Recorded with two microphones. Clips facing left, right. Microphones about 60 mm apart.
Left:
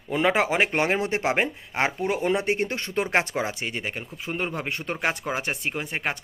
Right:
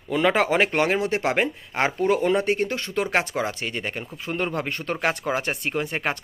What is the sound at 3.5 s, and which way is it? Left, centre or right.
Speech, centre.